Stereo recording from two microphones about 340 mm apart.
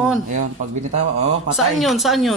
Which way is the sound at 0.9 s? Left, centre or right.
Centre.